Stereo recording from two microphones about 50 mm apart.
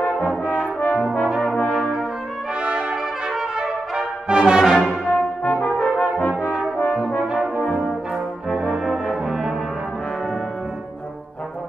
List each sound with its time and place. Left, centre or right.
0.0 s brass instrument: left
2.6 s brass instrument: centre
5.0 s brass instrument: left
8.5 s brass instrument: centre
8.8 s brass instrument: centre